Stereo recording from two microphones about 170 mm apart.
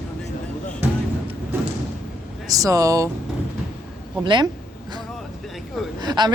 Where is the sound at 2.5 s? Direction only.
20° right (ahead or behind).